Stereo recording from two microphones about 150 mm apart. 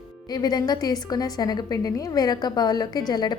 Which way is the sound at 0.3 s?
25° left (ahead or behind).